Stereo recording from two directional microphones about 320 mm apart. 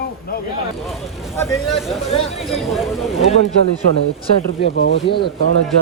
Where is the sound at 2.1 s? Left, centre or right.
Centre.